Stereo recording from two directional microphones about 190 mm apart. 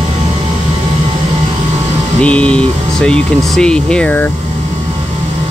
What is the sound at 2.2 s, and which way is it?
Speech, 5° left (ahead or behind).